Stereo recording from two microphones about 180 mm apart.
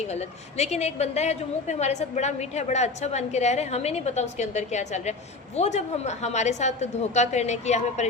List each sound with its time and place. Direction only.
0.1 s a woman's voice: 35° left (ahead or behind)